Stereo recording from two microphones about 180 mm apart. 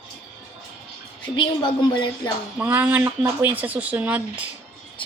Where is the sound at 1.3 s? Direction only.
25° left (ahead or behind).